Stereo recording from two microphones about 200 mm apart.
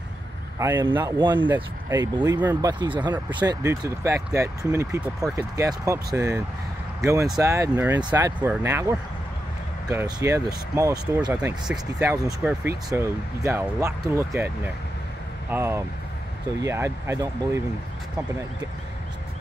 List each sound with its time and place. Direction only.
0.6 s speech: 10° right (ahead or behind)